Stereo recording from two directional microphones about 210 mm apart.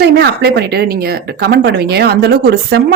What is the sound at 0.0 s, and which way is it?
Speech, 50° right (ahead or behind).